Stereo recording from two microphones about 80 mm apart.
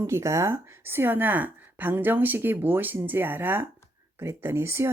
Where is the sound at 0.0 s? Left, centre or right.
Right.